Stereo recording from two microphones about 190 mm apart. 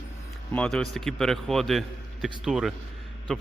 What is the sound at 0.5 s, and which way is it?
A man's voice, 5° left (ahead or behind).